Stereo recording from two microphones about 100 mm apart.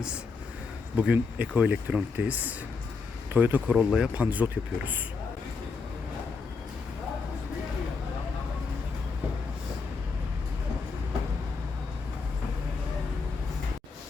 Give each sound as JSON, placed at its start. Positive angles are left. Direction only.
{"t": 0.9, "sound": "speech", "side_deg": -15}